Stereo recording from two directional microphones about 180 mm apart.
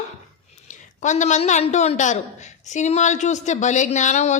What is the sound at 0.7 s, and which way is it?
A man's voice, 45° left (ahead or behind).